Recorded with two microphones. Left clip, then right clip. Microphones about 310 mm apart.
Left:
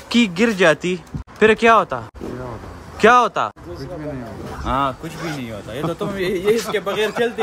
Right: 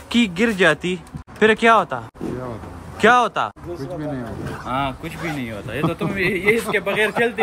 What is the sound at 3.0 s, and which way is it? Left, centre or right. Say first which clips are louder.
Speech: left 2 dB; centre.